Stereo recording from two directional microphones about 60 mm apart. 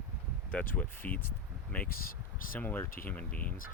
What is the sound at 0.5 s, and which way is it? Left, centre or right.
Speech, left.